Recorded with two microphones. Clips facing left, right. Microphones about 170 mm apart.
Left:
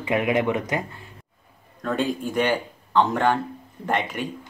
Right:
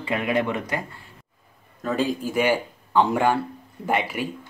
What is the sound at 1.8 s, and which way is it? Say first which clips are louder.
A man's voice: right 1 dB; centre (ahead or behind).